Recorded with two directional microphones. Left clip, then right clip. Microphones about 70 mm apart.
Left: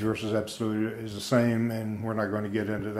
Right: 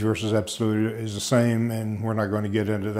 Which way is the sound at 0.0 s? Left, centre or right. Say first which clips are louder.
Right 4 dB; right.